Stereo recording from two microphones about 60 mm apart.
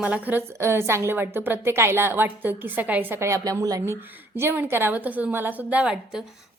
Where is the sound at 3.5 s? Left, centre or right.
Right.